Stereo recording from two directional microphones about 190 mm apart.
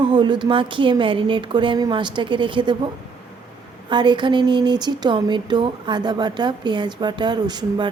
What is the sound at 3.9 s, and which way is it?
Speech, 25° right (ahead or behind).